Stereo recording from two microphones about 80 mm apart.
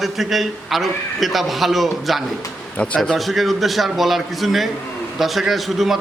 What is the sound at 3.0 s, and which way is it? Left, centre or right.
A man's voice, centre.